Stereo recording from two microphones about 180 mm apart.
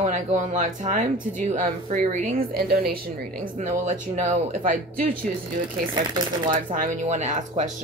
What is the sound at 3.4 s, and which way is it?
Speech, 45° right (ahead or behind).